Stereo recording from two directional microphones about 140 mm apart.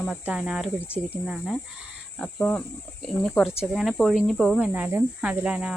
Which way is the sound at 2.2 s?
10° left (ahead or behind).